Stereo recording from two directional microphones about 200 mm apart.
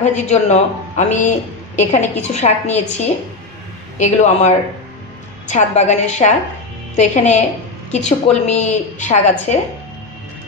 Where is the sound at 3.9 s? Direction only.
35° left (ahead or behind).